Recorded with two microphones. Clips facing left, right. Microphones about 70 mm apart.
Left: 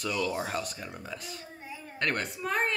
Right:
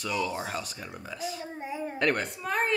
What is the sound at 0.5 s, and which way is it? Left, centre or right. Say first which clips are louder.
Speech: left 1 dB; centre.